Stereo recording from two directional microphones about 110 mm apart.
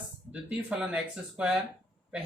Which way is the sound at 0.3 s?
10° right (ahead or behind).